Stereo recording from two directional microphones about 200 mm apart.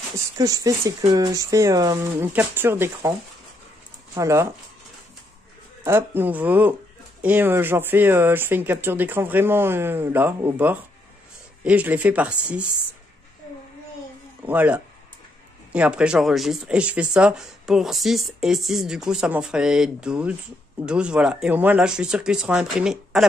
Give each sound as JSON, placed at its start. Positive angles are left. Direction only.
{"t": 0.4, "sound": "speech", "side_deg": -15}
{"t": 5.9, "sound": "speech", "side_deg": -10}
{"t": 14.4, "sound": "speech", "side_deg": -10}